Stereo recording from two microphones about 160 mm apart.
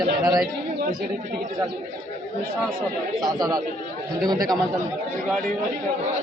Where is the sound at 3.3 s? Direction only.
25° right (ahead or behind).